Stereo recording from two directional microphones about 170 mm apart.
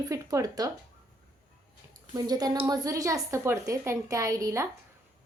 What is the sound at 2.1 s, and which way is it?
A woman's voice, 20° right (ahead or behind).